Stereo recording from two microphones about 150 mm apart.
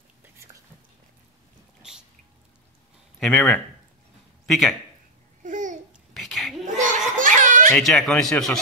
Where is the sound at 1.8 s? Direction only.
5° right (ahead or behind).